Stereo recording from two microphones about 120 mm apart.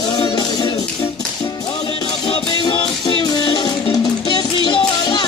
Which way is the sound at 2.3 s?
45° left (ahead or behind).